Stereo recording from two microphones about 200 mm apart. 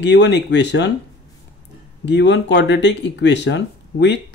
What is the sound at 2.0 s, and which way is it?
Speech, 60° left (ahead or behind).